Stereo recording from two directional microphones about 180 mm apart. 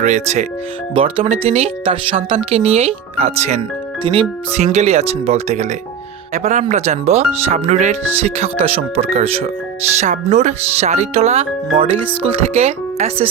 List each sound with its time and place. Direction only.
0.0 s speech: 40° right (ahead or behind)